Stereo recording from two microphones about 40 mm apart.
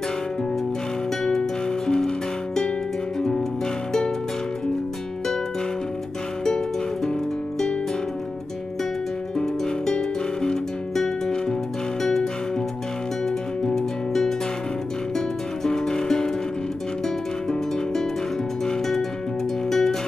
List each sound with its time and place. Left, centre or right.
1.2 s music: centre
9.4 s music: centre
13.7 s music: centre
19.7 s music: centre